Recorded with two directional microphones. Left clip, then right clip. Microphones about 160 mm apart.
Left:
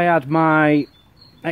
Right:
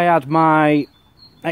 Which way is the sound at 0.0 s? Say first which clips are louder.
Right 2 dB; 35° right (ahead or behind).